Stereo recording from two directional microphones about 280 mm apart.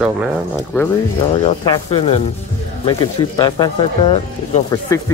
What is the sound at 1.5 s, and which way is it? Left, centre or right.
Speech, centre.